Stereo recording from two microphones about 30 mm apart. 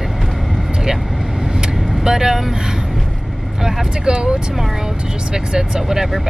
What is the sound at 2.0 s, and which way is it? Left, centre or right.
Speech, centre.